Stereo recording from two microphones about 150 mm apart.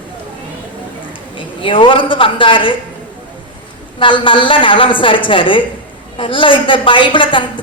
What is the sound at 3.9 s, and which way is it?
A woman's voice, 35° left (ahead or behind).